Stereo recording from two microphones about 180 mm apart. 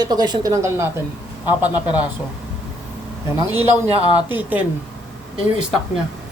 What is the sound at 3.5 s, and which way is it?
Speech, 10° right (ahead or behind).